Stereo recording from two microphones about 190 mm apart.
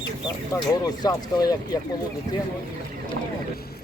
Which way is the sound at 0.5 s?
20° left (ahead or behind).